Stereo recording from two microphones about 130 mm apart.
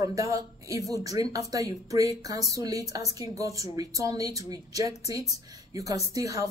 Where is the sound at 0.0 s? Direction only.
25° right (ahead or behind).